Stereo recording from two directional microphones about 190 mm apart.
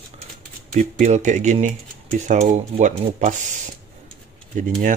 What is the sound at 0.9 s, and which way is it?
Speech, 35° right (ahead or behind).